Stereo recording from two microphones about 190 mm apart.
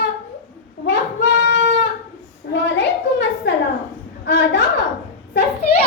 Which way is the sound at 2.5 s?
65° left (ahead or behind).